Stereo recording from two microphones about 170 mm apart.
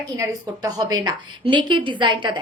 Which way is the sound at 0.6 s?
30° right (ahead or behind).